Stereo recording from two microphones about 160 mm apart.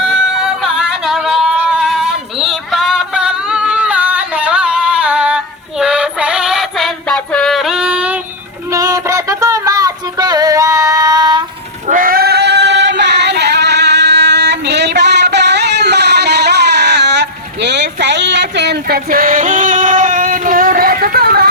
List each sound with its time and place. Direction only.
0.0 s a sound: centre (ahead or behind)
5.8 s music: 5° right (ahead or behind)
8.7 s synthetic singing: 20° right (ahead or behind)
11.9 s female singing: 60° right (ahead or behind)